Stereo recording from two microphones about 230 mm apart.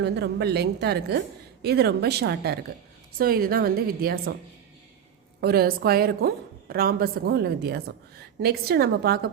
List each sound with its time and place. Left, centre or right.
0.0 s a woman's voice: right
5.4 s a woman's voice: right